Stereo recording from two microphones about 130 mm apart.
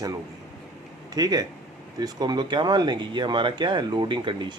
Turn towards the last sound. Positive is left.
turn(degrees=-35)  # may be behind; listen again after turning